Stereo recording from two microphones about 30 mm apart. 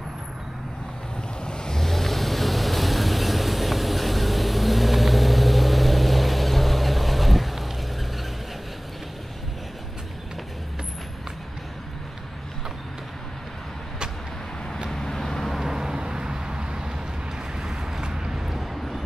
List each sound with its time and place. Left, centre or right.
1.8 s vehicle: centre
14.9 s vehicle: centre
15.6 s vehicle: right
17.6 s vehicle: centre
18.0 s a sound: right
18.8 s a sound: centre